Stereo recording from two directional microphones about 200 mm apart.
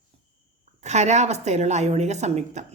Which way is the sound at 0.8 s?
35° right (ahead or behind).